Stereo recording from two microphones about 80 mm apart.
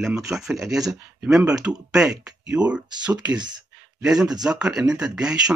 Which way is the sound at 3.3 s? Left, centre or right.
Right.